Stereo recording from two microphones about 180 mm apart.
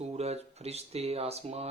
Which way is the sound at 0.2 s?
35° right (ahead or behind).